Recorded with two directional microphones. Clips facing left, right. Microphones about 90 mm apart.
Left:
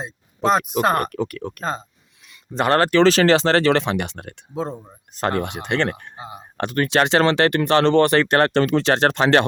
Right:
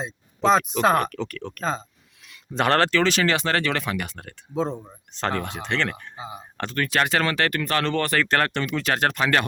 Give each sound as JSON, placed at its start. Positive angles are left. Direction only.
{"t": 0.0, "sound": "speech", "side_deg": 5}
{"t": 2.7, "sound": "speech", "side_deg": 10}
{"t": 3.0, "sound": "speech", "side_deg": 35}
{"t": 4.5, "sound": "speech", "side_deg": 5}
{"t": 5.3, "sound": "speech", "side_deg": 20}
{"t": 6.1, "sound": "speech", "side_deg": 0}
{"t": 6.6, "sound": "speech", "side_deg": 20}